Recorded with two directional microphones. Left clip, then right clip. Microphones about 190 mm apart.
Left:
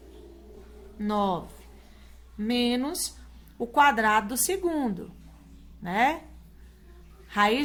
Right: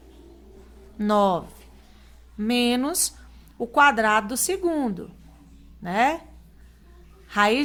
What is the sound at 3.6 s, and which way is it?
A woman's voice, 20° right (ahead or behind).